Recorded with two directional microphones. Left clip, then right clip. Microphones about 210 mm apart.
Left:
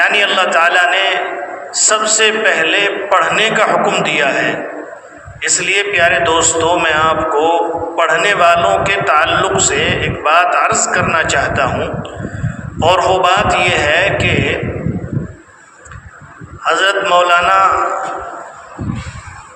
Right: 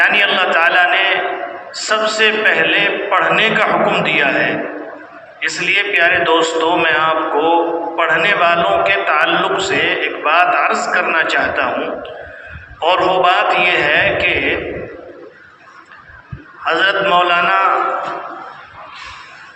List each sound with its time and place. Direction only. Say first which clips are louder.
0.0 s a sound: left 1 dB; 55° left (ahead or behind)
1.7 s a man's voice: left 3 dB; 55° left (ahead or behind)
16.6 s a man's voice: left 1 dB; 55° left (ahead or behind)